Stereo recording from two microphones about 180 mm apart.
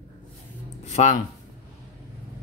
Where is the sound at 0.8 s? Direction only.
40° left (ahead or behind).